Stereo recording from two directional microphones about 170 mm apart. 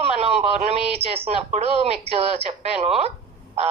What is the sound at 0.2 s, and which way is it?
A man's voice, 35° right (ahead or behind).